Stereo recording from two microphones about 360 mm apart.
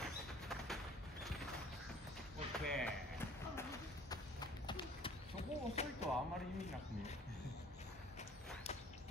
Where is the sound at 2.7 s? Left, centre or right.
Centre.